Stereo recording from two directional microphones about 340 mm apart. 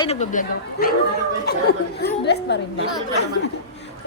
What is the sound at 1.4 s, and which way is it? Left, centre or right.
Speech, left.